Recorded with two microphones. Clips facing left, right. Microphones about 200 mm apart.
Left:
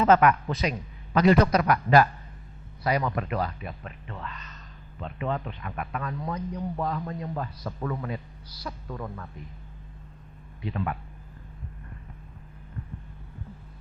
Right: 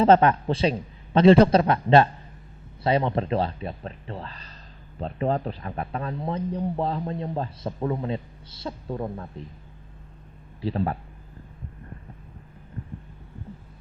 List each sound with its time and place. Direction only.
0.0 s a man's voice: 30° right (ahead or behind)
10.6 s speech: 35° right (ahead or behind)
12.8 s heart sounds: 30° right (ahead or behind)